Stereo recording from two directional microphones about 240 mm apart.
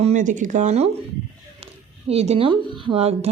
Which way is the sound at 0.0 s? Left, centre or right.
Right.